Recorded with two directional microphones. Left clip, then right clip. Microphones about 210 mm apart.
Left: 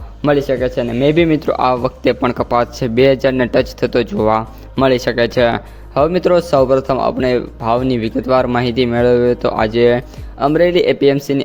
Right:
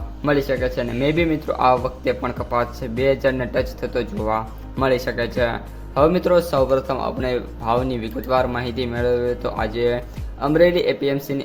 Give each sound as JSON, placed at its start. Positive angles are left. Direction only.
{"t": 0.2, "sound": "speech", "side_deg": 30}